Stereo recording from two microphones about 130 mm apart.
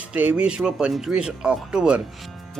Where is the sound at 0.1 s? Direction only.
10° right (ahead or behind).